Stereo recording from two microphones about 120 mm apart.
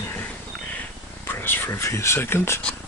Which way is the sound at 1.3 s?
15° left (ahead or behind).